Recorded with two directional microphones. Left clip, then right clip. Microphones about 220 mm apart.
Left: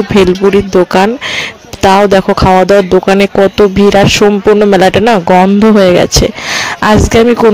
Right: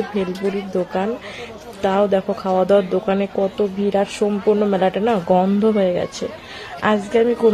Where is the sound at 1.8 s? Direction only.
45° left (ahead or behind).